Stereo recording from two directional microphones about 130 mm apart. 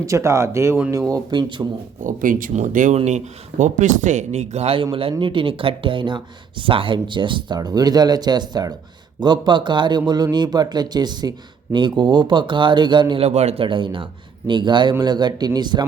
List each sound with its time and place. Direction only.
0.0 s speech: 25° right (ahead or behind)
2.0 s speech: 90° right; by 13.2 s 35° right (ahead or behind)
13.2 s a man's voice: 55° right (ahead or behind)
13.7 s speech: 40° right (ahead or behind)